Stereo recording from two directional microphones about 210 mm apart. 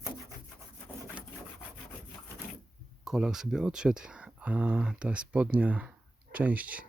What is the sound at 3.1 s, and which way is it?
Speech, 5° right (ahead or behind).